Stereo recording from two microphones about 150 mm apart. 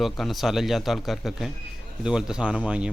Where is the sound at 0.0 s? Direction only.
Centre (ahead or behind).